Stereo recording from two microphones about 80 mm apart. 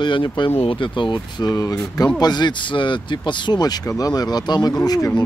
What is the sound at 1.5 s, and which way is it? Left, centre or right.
Speech, left.